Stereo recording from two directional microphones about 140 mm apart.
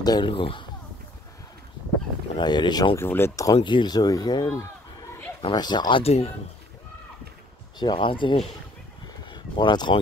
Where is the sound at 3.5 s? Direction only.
35° left (ahead or behind).